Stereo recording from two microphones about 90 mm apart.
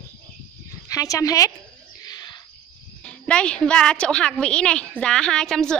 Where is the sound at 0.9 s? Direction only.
40° left (ahead or behind).